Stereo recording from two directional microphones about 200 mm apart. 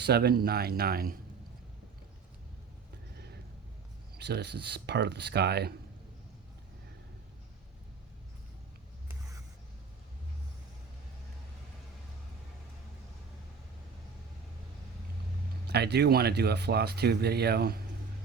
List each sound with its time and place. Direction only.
0.0 s speech: 55° right (ahead or behind)
4.2 s speech: 55° right (ahead or behind)
15.6 s speech: 55° right (ahead or behind)